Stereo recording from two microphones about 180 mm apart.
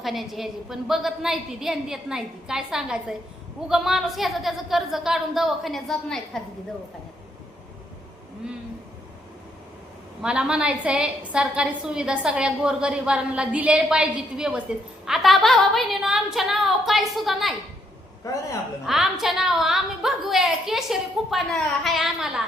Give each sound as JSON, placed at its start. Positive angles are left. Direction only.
{"t": 0.0, "sound": "a woman's voice", "side_deg": 0}
{"t": 10.2, "sound": "a woman's voice", "side_deg": -5}
{"t": 18.3, "sound": "a man's voice", "side_deg": 15}
{"t": 18.9, "sound": "a woman's voice", "side_deg": 0}